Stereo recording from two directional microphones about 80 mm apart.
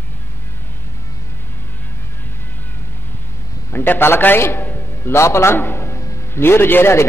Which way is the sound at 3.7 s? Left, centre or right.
Left.